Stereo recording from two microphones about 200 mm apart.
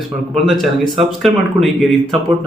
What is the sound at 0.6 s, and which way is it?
Speech, centre (ahead or behind).